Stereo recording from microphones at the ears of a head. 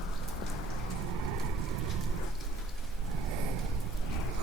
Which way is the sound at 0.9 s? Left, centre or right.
Right.